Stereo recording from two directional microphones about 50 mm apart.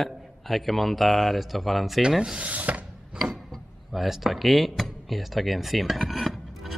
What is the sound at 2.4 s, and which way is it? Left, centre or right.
Speech, right.